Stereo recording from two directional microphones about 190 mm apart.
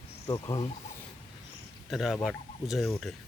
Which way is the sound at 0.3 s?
20° left (ahead or behind).